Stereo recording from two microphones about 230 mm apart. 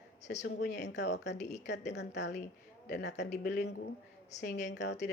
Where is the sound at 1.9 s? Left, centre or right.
Left.